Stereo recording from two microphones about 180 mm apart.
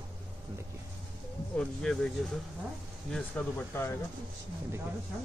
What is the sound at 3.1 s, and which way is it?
Speech, 10° left (ahead or behind).